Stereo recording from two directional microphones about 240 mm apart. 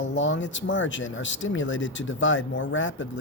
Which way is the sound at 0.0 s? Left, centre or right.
Left.